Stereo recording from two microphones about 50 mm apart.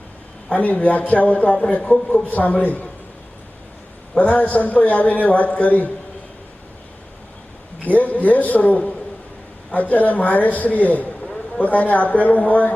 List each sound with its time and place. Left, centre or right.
0.5 s a man's voice: left
4.2 s a man's voice: left
7.9 s a man's voice: left